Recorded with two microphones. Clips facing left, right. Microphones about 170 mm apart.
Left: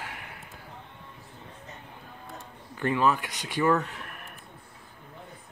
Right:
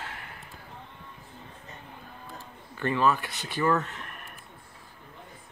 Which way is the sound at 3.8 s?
10° left (ahead or behind).